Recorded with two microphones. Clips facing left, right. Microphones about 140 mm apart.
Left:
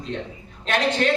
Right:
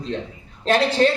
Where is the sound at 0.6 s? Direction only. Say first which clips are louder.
Right 4 dB; 35° right (ahead or behind).